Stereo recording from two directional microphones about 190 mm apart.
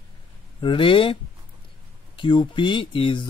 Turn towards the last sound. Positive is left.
turn(degrees=25)  # may be behind; listen again after turning